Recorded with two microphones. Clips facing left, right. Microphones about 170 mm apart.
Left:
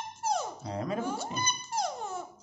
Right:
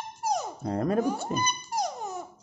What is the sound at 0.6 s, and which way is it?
Dog, 55° right (ahead or behind).